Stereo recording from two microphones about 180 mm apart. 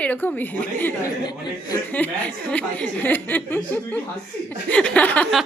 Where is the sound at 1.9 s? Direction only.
10° left (ahead or behind).